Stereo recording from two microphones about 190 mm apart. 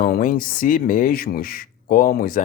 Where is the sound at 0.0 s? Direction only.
50° left (ahead or behind).